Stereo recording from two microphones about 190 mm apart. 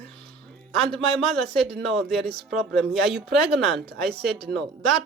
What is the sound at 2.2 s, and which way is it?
Speech, 60° right (ahead or behind).